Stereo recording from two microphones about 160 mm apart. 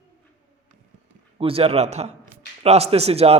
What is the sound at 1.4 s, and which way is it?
A man's voice, 35° right (ahead or behind).